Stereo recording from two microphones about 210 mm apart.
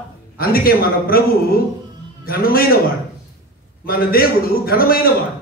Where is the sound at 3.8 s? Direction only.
45° left (ahead or behind).